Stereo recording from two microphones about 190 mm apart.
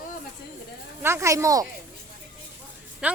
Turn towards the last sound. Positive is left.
turn(degrees=-5)  # may be behind; listen again after turning